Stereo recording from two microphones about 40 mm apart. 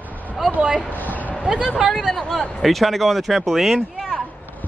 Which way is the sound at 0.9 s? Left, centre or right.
Left.